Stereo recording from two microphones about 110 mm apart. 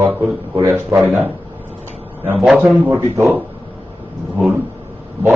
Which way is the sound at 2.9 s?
30° right (ahead or behind).